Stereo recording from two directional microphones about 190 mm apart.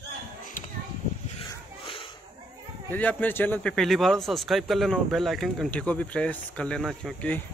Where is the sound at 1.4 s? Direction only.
25° left (ahead or behind).